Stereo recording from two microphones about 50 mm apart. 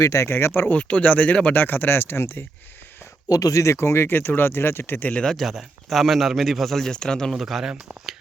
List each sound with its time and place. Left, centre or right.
0.0 s speech: left
0.3 s speech: left
0.7 s speech: left
1.6 s speech: left
3.5 s speech: left
5.2 s speech: centre
5.5 s speech: centre
7.3 s speech: centre